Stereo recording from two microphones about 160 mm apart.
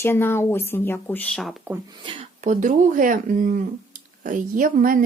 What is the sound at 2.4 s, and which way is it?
Speech, 50° right (ahead or behind).